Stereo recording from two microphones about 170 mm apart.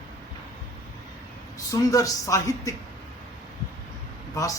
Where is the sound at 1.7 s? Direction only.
20° left (ahead or behind).